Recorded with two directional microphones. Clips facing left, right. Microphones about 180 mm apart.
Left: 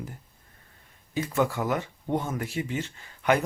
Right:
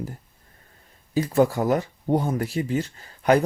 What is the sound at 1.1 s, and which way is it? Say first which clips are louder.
Speech: right 6 dB; 35° right (ahead or behind).